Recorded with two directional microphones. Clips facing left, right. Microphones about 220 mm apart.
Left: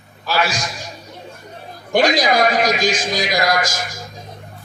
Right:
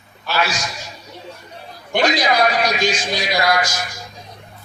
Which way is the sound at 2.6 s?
90° left.